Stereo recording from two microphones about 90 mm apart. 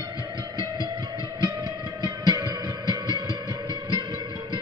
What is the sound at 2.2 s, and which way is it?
Music, 45° right (ahead or behind).